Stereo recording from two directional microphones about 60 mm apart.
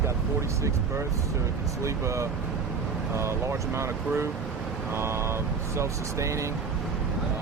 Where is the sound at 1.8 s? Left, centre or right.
Right.